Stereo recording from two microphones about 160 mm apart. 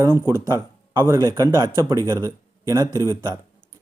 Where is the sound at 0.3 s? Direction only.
20° right (ahead or behind).